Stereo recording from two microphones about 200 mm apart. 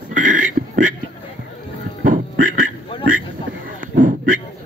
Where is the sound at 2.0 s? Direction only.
40° right (ahead or behind).